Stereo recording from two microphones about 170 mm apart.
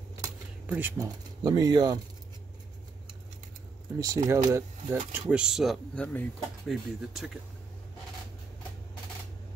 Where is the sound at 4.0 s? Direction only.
20° right (ahead or behind); by 7.4 s centre (ahead or behind).